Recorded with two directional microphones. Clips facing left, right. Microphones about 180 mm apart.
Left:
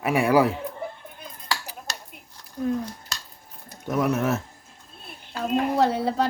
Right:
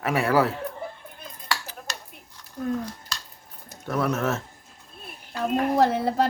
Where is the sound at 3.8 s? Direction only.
15° left (ahead or behind).